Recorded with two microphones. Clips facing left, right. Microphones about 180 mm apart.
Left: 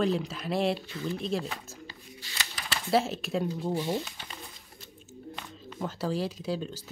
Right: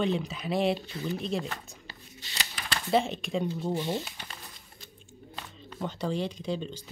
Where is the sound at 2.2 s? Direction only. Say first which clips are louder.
Right 1 dB; 20° right (ahead or behind).